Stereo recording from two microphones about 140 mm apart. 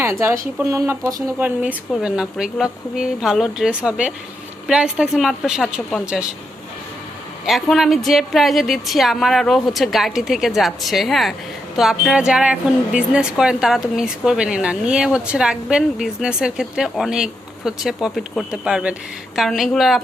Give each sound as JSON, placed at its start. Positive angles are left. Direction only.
{"t": 0.0, "sound": "speech", "side_deg": -20}
{"t": 7.4, "sound": "speech", "side_deg": 0}